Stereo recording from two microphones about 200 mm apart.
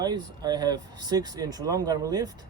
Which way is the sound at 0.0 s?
20° right (ahead or behind).